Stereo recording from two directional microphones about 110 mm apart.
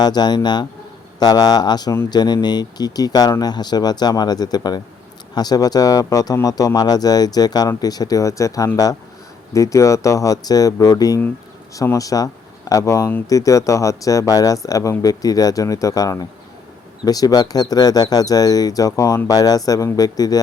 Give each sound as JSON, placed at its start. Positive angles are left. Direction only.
{"t": 0.0, "sound": "speech", "side_deg": 40}